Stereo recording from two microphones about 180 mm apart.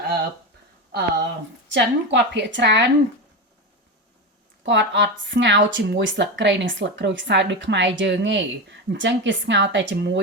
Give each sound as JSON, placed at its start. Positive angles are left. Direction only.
{"t": 0.0, "sound": "a sound", "side_deg": -60}
{"t": 1.7, "sound": "a woman's voice", "side_deg": -80}
{"t": 4.6, "sound": "speech", "side_deg": -75}